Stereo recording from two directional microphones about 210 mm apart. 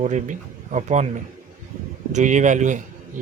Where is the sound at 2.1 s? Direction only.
35° right (ahead or behind).